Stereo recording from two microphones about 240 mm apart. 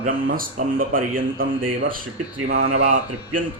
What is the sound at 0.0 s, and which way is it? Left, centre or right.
A man's voice, right.